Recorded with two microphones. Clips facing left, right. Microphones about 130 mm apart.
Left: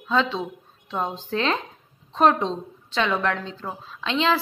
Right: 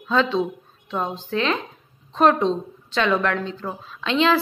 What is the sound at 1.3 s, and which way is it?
A woman's voice, 30° left (ahead or behind).